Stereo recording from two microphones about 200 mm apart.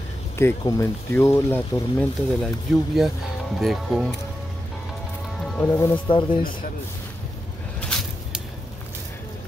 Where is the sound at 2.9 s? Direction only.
Centre (ahead or behind).